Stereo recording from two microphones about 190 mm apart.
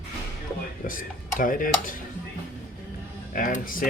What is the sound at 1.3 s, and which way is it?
Speech, 45° left (ahead or behind).